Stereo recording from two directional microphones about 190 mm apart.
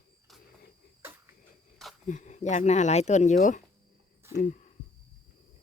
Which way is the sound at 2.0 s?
40° left (ahead or behind).